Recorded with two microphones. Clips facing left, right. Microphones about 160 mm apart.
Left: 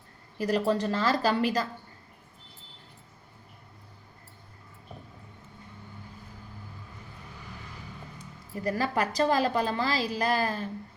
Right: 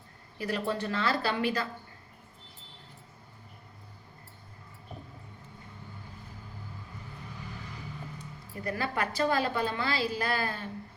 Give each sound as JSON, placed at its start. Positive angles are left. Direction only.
{"t": 0.3, "sound": "a woman's voice", "side_deg": 40}
{"t": 8.6, "sound": "a woman's voice", "side_deg": 40}